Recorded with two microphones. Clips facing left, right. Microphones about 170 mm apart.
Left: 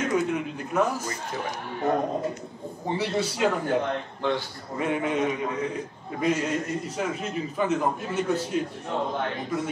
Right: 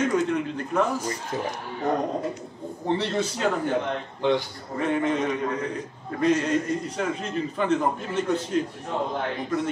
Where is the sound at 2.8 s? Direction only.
10° left (ahead or behind).